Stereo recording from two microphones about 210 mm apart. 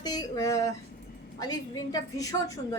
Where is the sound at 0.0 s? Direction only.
20° left (ahead or behind).